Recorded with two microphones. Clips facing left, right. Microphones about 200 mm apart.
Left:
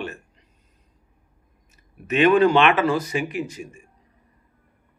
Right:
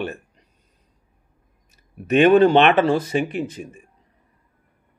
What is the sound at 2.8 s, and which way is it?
Speech, 30° right (ahead or behind).